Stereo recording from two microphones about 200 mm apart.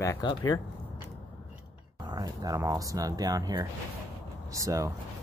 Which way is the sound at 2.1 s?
20° right (ahead or behind).